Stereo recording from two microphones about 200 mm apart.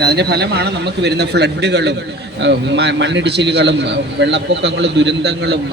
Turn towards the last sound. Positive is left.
turn(degrees=-60)  # may be behind; listen again after turning